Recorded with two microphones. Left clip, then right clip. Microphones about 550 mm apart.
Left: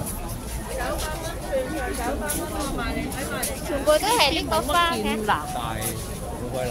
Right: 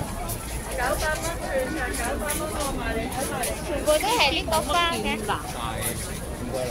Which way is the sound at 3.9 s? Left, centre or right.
Left.